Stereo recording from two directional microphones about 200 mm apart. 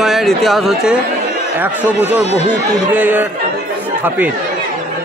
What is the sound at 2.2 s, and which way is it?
Speech, 35° left (ahead or behind).